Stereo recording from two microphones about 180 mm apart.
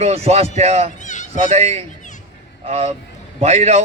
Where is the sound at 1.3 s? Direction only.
35° right (ahead or behind).